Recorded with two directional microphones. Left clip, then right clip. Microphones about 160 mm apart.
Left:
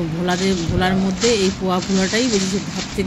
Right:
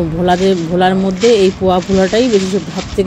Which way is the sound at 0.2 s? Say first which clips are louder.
Right 9 dB; 15° right (ahead or behind).